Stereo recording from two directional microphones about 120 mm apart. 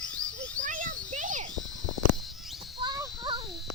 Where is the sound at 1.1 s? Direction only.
90° right.